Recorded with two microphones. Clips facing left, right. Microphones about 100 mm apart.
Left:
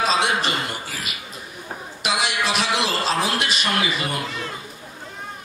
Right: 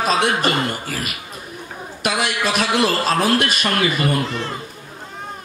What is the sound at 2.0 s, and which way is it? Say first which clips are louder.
A man's voice: right 2 dB; 50° right (ahead or behind).